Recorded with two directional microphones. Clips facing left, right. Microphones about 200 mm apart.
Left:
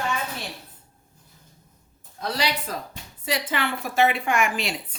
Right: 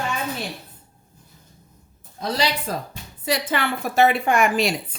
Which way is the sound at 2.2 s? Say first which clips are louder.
Right 3 dB; 30° right (ahead or behind).